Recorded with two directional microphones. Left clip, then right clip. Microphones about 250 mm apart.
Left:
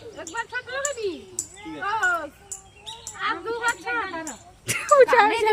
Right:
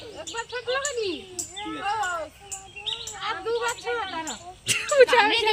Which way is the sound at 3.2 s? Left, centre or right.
Right.